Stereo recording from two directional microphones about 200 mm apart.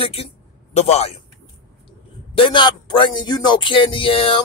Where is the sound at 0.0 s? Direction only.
30° left (ahead or behind).